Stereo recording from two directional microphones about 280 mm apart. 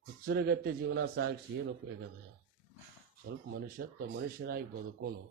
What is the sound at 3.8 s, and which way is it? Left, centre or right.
Speech, right.